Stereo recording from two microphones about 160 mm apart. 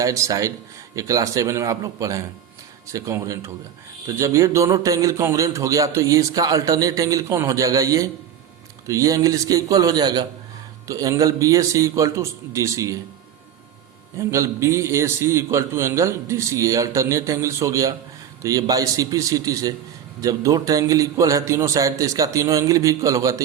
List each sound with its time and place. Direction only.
0.0 s speech: 20° right (ahead or behind)
14.2 s a man's voice: 20° right (ahead or behind)